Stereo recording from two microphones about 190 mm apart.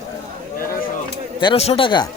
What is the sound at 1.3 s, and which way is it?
Speech, 30° left (ahead or behind).